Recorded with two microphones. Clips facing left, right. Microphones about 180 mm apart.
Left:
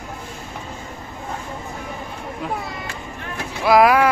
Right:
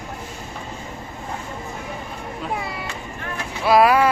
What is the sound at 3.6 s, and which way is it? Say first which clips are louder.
Speech: left 1 dB; 10° left (ahead or behind).